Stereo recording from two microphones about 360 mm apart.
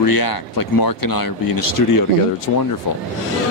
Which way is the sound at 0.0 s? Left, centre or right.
Left.